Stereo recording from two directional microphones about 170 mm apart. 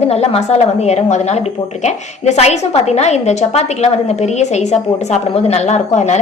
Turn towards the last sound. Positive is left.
turn(degrees=40)  # may be behind; listen again after turning